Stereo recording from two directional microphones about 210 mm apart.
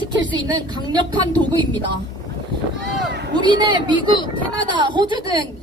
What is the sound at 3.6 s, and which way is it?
A woman's voice, 20° right (ahead or behind).